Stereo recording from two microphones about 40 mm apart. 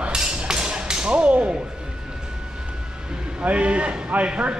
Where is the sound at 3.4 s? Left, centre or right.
Right.